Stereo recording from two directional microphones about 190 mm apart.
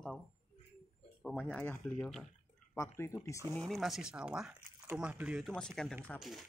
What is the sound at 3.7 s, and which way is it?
Speech, centre (ahead or behind).